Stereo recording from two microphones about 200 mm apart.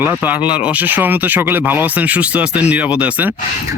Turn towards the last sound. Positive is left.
turn(degrees=-5)  # may be behind; listen again after turning